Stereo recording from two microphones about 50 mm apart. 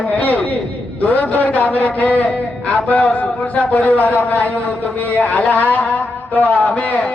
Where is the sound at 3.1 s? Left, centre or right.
Left.